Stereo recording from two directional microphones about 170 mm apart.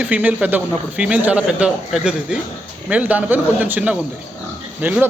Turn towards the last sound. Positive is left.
turn(degrees=-10)  # may be behind; listen again after turning